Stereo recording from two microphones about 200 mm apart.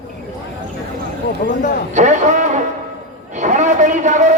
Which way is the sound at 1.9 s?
35° right (ahead or behind).